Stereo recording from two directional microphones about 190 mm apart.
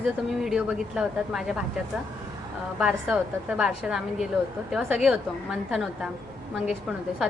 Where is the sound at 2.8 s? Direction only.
5° right (ahead or behind).